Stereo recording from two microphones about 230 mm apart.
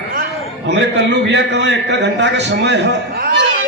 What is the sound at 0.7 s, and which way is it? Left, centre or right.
A man's voice, right.